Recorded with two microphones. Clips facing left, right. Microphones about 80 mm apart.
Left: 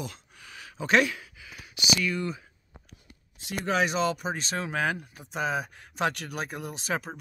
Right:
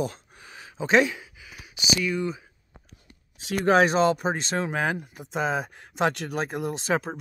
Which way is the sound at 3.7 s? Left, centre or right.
Right.